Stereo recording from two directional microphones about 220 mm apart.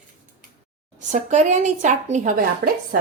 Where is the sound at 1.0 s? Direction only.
35° right (ahead or behind).